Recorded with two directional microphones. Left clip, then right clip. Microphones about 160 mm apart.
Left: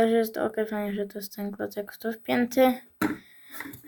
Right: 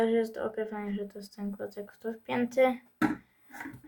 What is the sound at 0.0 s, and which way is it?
Speech, 35° left (ahead or behind).